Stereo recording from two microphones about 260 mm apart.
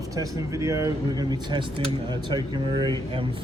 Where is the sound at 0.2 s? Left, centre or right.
Centre.